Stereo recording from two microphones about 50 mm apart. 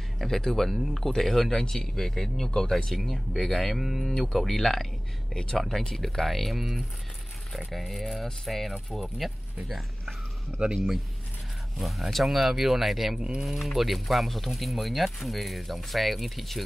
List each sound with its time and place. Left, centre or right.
0.2 s speech: centre
13.2 s speech: centre